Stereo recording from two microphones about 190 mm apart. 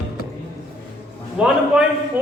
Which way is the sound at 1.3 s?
5° right (ahead or behind).